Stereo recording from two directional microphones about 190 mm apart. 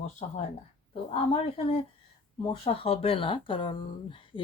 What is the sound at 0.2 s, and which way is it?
Speech, 30° left (ahead or behind).